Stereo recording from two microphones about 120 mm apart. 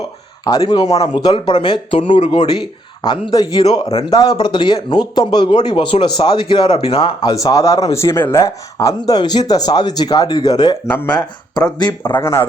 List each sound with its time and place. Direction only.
0.5 s speech: 25° left (ahead or behind); by 7.0 s 55° left (ahead or behind)
7.4 s speech: 25° left (ahead or behind)
10.8 s speech: 15° left (ahead or behind)
11.5 s speech: 35° left (ahead or behind)
12.2 s speech: 20° left (ahead or behind)